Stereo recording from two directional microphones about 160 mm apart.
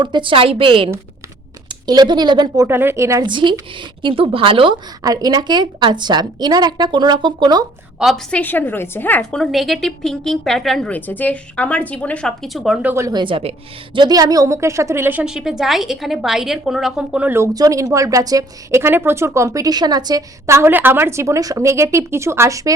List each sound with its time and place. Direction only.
0.0 s a woman's voice: 30° right (ahead or behind)
1.9 s a woman's voice: 25° right (ahead or behind)
2.6 s a woman's voice: 15° right (ahead or behind)
7.9 s a woman's voice: centre (ahead or behind)
12.9 s a woman's voice: 20° right (ahead or behind)